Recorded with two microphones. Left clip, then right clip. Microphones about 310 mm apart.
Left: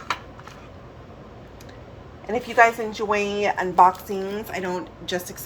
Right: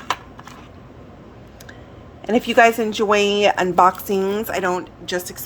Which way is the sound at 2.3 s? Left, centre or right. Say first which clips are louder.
Right 4 dB; right.